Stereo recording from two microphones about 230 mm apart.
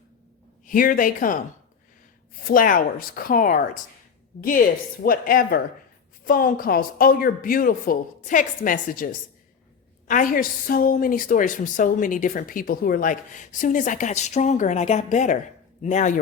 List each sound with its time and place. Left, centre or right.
0.6 s a woman's voice: left
2.4 s a woman's voice: left
10.1 s a woman's voice: left